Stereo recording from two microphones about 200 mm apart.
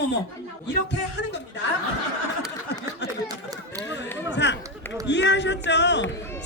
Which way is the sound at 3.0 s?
60° left (ahead or behind).